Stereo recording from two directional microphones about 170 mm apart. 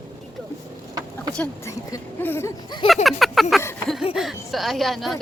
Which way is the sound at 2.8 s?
Centre (ahead or behind).